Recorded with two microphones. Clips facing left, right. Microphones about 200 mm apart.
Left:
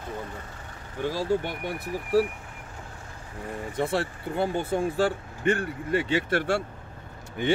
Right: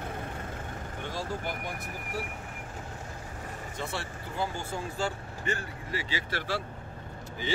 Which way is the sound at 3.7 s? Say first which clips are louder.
Left 11 dB; 60° left (ahead or behind).